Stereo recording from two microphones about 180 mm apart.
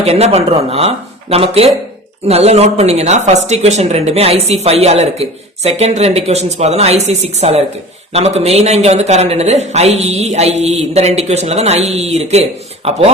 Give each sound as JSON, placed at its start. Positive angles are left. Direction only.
{"t": 0.0, "sound": "a woman's voice", "side_deg": -35}